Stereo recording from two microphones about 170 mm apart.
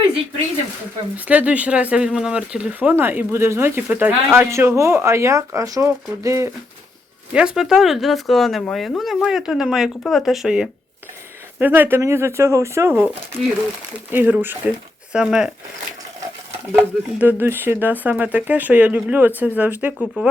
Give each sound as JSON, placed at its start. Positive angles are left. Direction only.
{"t": 1.1, "sound": "speech", "side_deg": -10}
{"t": 7.3, "sound": "speech", "side_deg": -5}
{"t": 14.1, "sound": "speech", "side_deg": -10}
{"t": 16.7, "sound": "speech", "side_deg": -10}